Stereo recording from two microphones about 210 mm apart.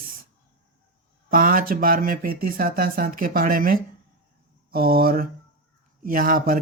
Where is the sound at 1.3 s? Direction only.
40° right (ahead or behind).